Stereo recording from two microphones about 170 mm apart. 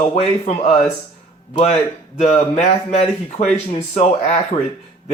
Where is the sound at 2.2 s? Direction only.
40° left (ahead or behind).